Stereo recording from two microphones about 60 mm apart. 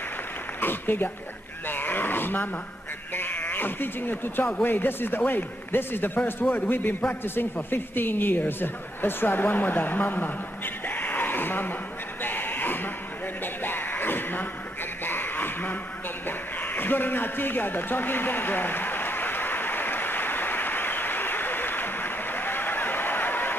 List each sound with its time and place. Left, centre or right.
0.6 s a man's voice: left
1.7 s a sound: left
3.2 s speech: left
12.2 s sheep: left
13.6 s music: left
15.0 s a sound: left